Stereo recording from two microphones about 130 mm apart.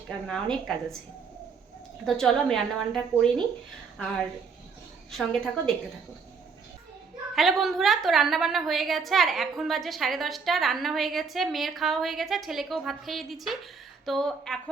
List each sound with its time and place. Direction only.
0.1 s a woman's voice: 5° left (ahead or behind)
2.0 s a woman's voice: 5° left (ahead or behind)
5.1 s a woman's voice: 5° left (ahead or behind)
7.3 s a woman's voice: centre (ahead or behind)